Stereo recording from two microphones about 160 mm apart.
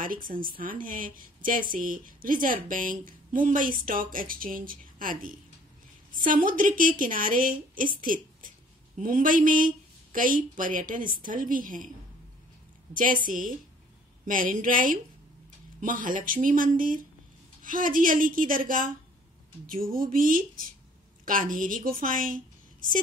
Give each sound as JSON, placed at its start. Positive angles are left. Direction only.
{"t": 0.0, "sound": "a woman's voice", "side_deg": -60}
{"t": 12.9, "sound": "a woman's voice", "side_deg": -60}